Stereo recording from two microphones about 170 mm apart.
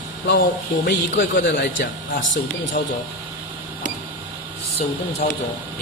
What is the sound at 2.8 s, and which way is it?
Speech, 65° left (ahead or behind).